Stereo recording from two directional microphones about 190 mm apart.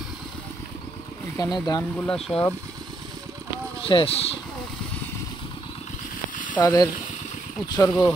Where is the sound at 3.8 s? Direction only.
30° left (ahead or behind).